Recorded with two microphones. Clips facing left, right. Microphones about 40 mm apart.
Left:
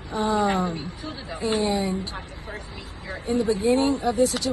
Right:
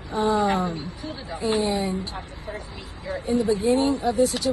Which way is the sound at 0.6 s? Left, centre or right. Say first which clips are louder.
Even; left.